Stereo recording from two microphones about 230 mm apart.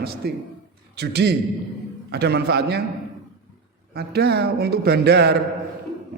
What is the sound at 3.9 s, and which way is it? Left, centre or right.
A man's voice, right.